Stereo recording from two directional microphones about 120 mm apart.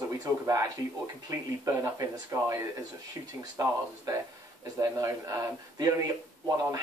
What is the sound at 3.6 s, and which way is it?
Speech, 25° right (ahead or behind).